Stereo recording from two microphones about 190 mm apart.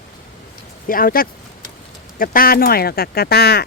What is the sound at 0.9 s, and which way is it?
Speech, 50° left (ahead or behind).